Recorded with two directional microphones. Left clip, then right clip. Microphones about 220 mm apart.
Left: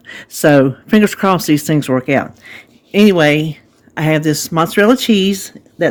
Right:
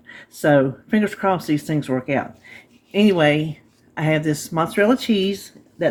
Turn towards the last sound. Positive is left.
turn(degrees=50)  # may be behind; listen again after turning